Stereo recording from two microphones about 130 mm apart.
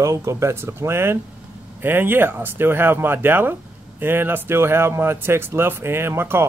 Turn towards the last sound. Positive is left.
turn(degrees=-20)  # may be behind; listen again after turning